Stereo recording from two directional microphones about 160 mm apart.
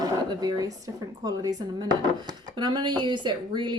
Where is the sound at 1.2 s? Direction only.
25° right (ahead or behind).